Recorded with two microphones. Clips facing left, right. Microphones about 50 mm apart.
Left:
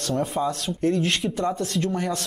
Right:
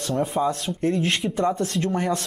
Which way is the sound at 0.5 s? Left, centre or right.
Right.